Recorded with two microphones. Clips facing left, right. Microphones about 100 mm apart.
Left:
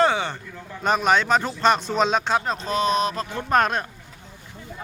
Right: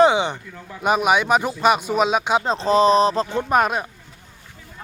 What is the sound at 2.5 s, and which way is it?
Speech, 30° right (ahead or behind).